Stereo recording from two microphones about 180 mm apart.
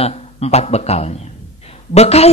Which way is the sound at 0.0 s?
35° left (ahead or behind).